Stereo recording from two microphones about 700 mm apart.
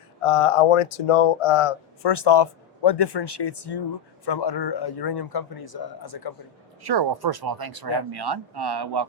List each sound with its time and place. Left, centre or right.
0.2 s speech: left
6.8 s speech: right